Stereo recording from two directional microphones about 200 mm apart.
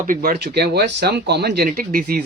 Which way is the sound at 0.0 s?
45° right (ahead or behind).